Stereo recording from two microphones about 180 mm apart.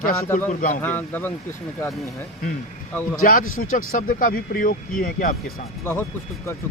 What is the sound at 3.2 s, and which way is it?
Speech, 50° left (ahead or behind).